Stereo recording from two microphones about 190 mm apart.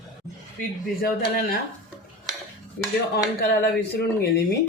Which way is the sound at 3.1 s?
60° left (ahead or behind).